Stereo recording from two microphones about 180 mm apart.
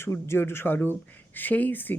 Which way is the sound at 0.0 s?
15° left (ahead or behind).